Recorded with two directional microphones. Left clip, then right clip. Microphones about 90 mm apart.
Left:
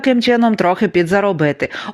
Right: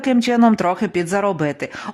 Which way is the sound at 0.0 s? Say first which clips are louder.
Left 3 dB; 20° left (ahead or behind).